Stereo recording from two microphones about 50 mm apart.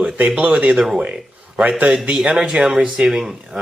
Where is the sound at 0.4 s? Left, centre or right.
Right.